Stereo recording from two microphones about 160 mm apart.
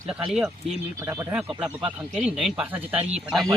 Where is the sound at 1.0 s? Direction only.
15° right (ahead or behind).